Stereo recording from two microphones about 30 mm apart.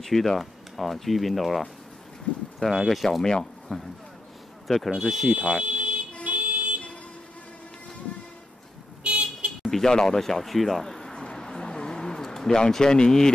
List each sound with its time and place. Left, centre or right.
0.0 s speech: centre
2.3 s boat: left
2.7 s speech: centre
3.1 s speech: centre
3.6 s a man's voice: centre
5.3 s speech: right
5.7 s a sound: right
6.2 s vehicle: right
9.0 s vehicle: right
9.7 s speech: centre
11.1 s a sound: left
12.8 s speech: left